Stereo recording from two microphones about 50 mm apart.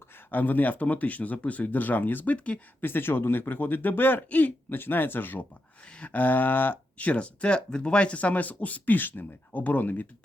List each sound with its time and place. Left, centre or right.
0.3 s speech: left
2.8 s speech: left
4.7 s speech: left
7.1 s speech: left